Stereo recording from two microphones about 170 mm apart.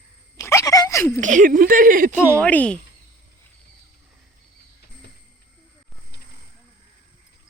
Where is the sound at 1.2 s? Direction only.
50° right (ahead or behind).